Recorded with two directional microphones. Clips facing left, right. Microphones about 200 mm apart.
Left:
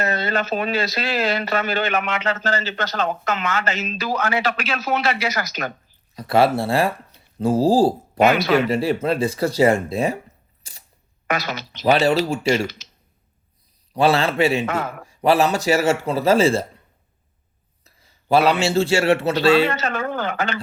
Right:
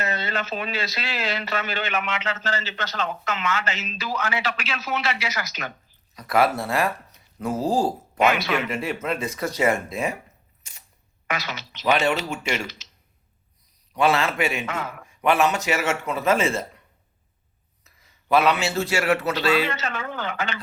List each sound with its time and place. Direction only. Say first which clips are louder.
0.1 s a sound: left 5 dB; 50° left (ahead or behind)
0.4 s speech: left 7 dB; 45° left (ahead or behind)
2.7 s speech: left 6 dB; 40° left (ahead or behind)
3.0 s speech: left 4 dB; 50° left (ahead or behind)
6.1 s speech: left 4 dB; 30° left (ahead or behind)
10.6 s camera: left 3 dB; 35° left (ahead or behind)
11.3 s speech: left 6 dB; 50° left (ahead or behind); by 12.9 s 35° left (ahead or behind)
13.9 s speech: left 4 dB; 30° left (ahead or behind)
17.8 s a man's voice: left 5 dB; 30° left (ahead or behind)
19.8 s speech: left 6 dB; 50° left (ahead or behind)